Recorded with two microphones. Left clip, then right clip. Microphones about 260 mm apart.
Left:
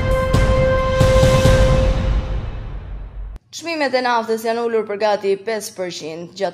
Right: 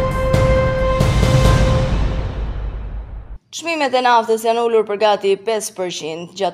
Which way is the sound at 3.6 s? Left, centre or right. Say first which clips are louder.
Right 2 dB; right.